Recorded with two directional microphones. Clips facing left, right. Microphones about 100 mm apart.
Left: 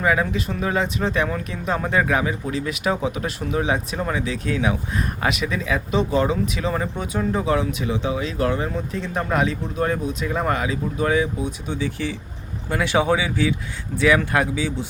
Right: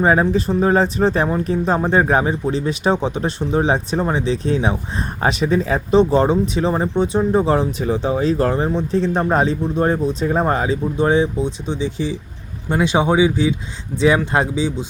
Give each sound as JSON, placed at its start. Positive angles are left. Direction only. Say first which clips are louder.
{"t": 0.0, "sound": "speech", "louder": "right 6 dB", "side_deg": -35}
{"t": 14.3, "sound": "speech", "louder": "right 3 dB", "side_deg": -25}